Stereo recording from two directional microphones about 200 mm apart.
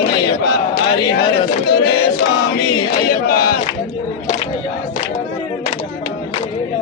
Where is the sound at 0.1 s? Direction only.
60° left (ahead or behind).